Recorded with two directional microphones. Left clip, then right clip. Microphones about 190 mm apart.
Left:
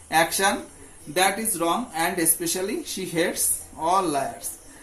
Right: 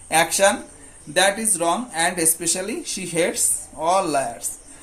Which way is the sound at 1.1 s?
35° right (ahead or behind).